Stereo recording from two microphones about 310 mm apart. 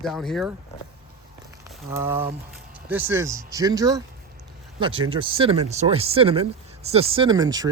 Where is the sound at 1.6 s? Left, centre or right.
Centre.